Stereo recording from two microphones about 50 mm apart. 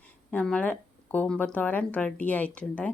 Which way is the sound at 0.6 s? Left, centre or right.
Left.